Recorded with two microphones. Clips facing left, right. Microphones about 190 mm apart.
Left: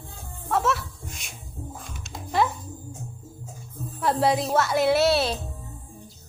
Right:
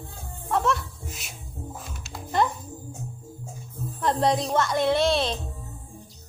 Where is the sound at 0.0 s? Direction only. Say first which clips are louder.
Right 1 dB; centre (ahead or behind).